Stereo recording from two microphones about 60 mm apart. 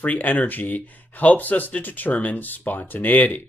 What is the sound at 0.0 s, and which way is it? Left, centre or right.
Speech, left.